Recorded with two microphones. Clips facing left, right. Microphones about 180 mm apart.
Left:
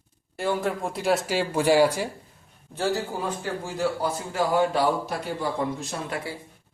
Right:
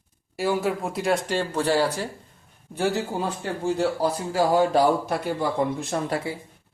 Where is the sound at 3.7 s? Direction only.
35° right (ahead or behind).